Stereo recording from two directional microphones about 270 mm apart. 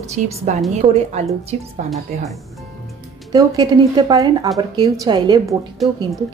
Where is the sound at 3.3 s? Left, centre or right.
Centre.